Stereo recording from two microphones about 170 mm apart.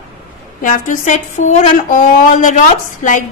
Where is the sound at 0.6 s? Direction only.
50° left (ahead or behind).